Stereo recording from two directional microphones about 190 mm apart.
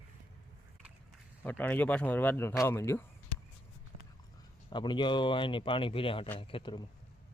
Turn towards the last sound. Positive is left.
turn(degrees=25)  # may be behind; listen again after turning